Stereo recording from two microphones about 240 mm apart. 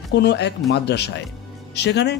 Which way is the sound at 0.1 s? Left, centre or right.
Left.